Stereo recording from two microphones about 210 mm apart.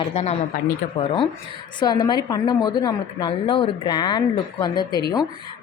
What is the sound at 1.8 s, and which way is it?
A woman's voice, 20° left (ahead or behind).